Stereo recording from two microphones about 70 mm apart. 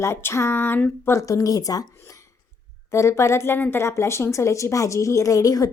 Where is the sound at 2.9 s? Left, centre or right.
Left.